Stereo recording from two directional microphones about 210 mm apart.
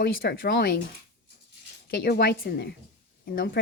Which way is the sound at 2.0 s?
50° left (ahead or behind).